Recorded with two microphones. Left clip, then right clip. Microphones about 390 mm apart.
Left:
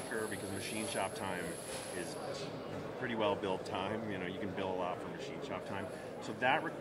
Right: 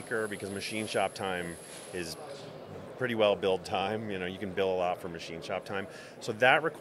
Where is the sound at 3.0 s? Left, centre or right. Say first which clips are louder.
Right 8 dB; right.